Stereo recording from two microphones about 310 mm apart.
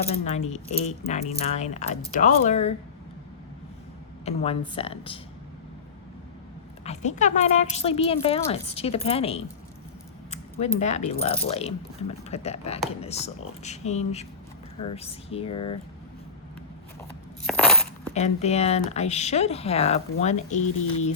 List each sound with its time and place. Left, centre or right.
0.1 s speech: centre
4.3 s speech: centre
6.8 s speech: left
17.4 s coin: centre
18.1 s speech: left